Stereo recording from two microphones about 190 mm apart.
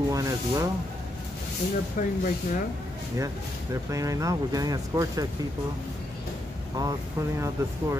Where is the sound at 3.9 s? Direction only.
15° right (ahead or behind).